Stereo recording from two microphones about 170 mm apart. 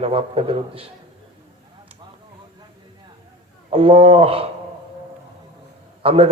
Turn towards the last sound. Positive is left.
turn(degrees=-35)  # may be behind; listen again after turning